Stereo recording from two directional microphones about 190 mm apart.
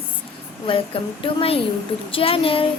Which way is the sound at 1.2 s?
30° left (ahead or behind).